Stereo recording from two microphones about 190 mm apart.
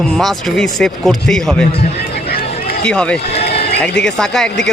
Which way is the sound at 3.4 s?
60° left (ahead or behind).